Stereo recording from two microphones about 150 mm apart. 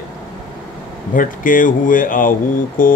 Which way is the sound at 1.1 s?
65° left (ahead or behind).